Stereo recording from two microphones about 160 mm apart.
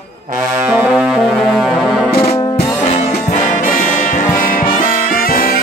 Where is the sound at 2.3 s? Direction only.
40° left (ahead or behind).